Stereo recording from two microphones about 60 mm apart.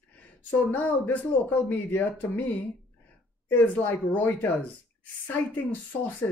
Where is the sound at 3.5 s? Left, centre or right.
Left.